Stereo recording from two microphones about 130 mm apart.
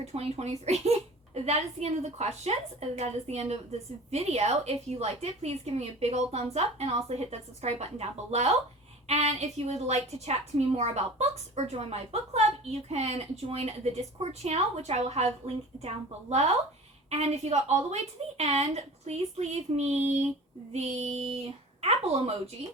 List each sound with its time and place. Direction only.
0.1 s a woman's voice: 55° right (ahead or behind)
17.1 s a woman's voice: 55° right (ahead or behind)